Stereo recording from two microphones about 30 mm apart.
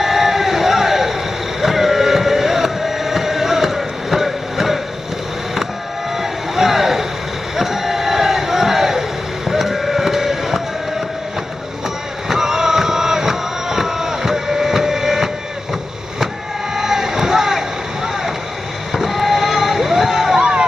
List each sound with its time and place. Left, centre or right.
0.0 s vehicle: centre
1.6 s a sound: centre
6.1 s vehicle: centre
7.5 s crowd: centre
9.5 s a sound: centre
12.3 s music: centre
16.7 s vehicle: centre
18.9 s fireworks: centre
20.3 s a sound: right